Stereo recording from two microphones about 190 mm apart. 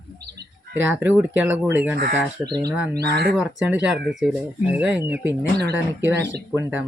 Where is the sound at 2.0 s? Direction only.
55° right (ahead or behind).